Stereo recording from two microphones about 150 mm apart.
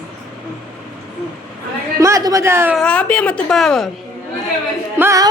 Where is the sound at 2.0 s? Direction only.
20° right (ahead or behind).